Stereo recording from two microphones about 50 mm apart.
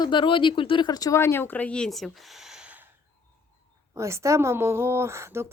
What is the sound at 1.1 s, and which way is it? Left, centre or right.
Speech, left.